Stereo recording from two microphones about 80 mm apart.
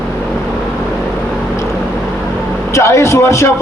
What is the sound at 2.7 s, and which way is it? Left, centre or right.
Speech, left.